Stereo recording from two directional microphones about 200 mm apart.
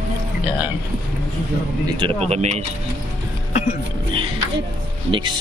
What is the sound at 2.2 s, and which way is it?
Speech, 35° right (ahead or behind).